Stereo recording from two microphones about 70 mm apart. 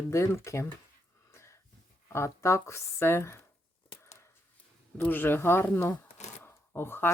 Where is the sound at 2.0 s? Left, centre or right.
Left.